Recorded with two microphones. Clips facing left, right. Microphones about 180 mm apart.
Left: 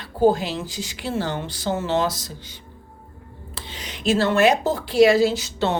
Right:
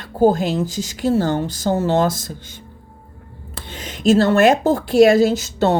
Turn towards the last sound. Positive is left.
turn(degrees=-45)  # may be behind; listen again after turning